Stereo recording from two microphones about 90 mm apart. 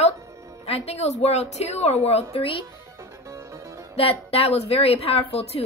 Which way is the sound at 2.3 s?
90° left.